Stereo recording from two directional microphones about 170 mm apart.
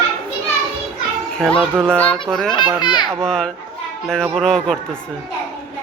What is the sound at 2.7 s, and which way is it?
Speech, 25° left (ahead or behind).